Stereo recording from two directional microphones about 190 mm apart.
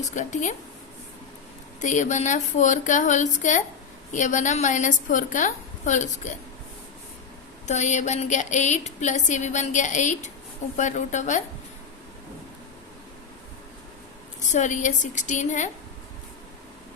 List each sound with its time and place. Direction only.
0.0 s a woman's voice: 40° left (ahead or behind)
1.8 s a woman's voice: 40° left (ahead or behind)
7.7 s a woman's voice: 40° left (ahead or behind)
14.4 s a woman's voice: 40° left (ahead or behind)